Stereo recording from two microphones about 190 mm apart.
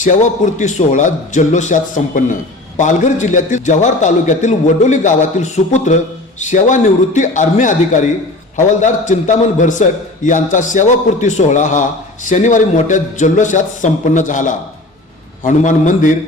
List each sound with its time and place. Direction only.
0.0 s a man's voice: 40° left (ahead or behind)